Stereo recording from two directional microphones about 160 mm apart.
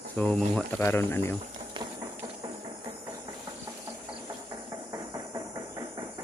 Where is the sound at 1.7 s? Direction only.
30° right (ahead or behind).